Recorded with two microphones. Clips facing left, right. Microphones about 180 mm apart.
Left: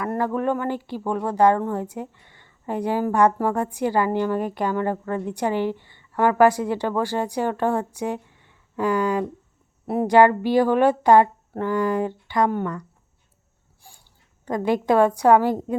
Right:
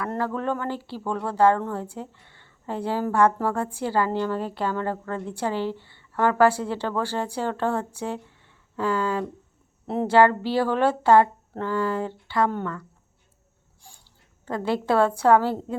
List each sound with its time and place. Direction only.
0.0 s speech: 15° left (ahead or behind)
14.4 s speech: 15° left (ahead or behind)